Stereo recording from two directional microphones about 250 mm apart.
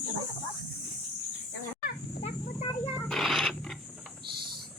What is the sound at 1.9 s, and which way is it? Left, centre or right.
Snake, left.